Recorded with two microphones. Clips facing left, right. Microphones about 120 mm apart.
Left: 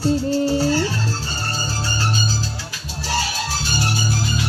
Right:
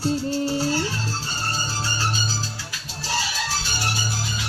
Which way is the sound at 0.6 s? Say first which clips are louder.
Left 5 dB; 70° left (ahead or behind).